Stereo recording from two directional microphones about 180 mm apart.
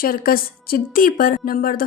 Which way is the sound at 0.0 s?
55° left (ahead or behind).